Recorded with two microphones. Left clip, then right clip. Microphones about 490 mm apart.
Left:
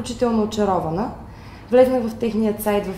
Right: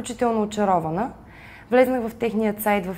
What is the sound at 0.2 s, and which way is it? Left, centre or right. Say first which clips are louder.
A woman's voice: left 2 dB; right.